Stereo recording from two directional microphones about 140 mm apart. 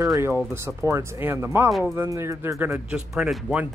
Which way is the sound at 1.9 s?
20° right (ahead or behind).